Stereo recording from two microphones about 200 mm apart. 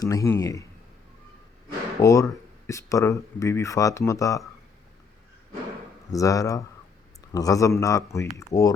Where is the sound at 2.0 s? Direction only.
15° left (ahead or behind).